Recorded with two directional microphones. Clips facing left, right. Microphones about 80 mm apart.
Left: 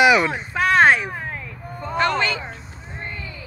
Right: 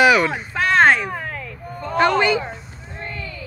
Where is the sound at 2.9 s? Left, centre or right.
Centre.